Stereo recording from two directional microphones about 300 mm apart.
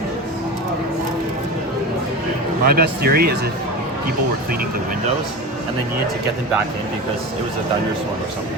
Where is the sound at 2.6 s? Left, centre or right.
Right.